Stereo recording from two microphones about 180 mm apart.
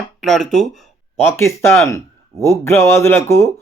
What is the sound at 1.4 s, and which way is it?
A man's voice, 15° left (ahead or behind).